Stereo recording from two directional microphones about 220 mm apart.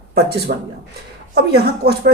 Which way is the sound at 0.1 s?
45° right (ahead or behind).